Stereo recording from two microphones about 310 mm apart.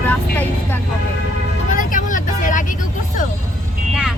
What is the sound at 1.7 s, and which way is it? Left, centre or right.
Vehicle, left.